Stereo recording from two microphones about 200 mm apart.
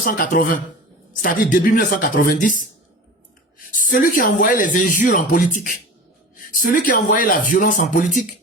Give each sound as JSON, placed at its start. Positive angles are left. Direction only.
{"t": 0.0, "sound": "speech", "side_deg": 45}
{"t": 3.7, "sound": "speech", "side_deg": 40}